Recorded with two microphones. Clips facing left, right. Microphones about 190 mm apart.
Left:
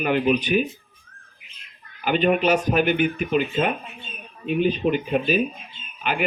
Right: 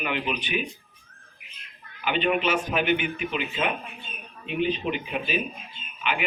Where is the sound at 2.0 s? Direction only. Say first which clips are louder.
Left 5 dB; 45° left (ahead or behind).